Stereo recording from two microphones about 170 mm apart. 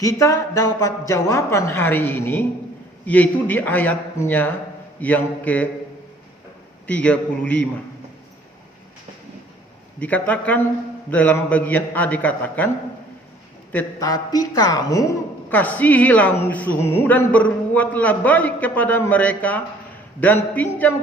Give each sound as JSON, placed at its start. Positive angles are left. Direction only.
{"t": 0.0, "sound": "a woman's voice", "side_deg": 20}
{"t": 6.8, "sound": "a woman's voice", "side_deg": 5}
{"t": 10.0, "sound": "a woman's voice", "side_deg": 10}
{"t": 14.0, "sound": "a woman's voice", "side_deg": 25}